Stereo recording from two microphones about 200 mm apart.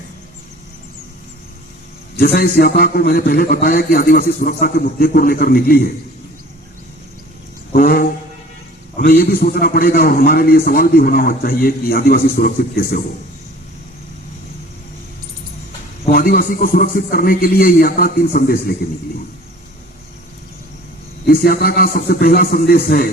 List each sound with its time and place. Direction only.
2.1 s a man's voice: 50° left (ahead or behind)
7.7 s a man's voice: 50° left (ahead or behind)
16.0 s a man's voice: 45° left (ahead or behind)
21.2 s a man's voice: 50° left (ahead or behind)